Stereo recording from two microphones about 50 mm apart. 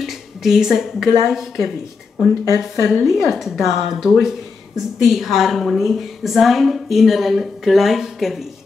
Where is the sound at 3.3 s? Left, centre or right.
Centre.